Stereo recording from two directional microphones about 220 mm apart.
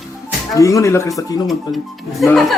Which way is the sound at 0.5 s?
15° left (ahead or behind).